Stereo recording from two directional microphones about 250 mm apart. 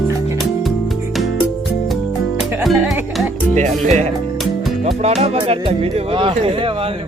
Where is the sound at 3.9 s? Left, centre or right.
Right.